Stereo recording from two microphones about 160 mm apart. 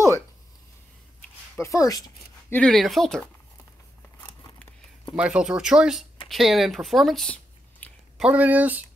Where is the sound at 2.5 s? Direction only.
5° left (ahead or behind).